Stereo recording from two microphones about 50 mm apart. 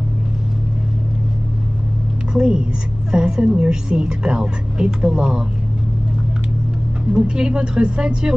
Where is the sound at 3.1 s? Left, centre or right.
Centre.